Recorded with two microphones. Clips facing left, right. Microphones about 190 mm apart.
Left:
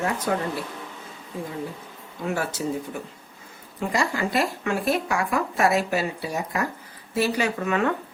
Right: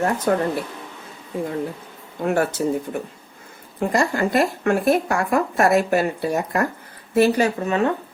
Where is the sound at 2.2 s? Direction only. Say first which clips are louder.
Right 7 dB; 55° right (ahead or behind).